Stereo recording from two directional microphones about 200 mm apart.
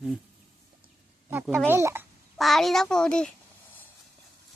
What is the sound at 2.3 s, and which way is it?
Speech, centre (ahead or behind).